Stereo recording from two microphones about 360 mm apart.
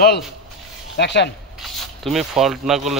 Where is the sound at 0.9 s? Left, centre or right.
Left.